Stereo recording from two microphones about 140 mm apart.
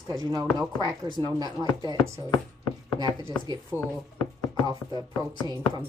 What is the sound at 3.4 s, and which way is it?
Speech, 30° right (ahead or behind).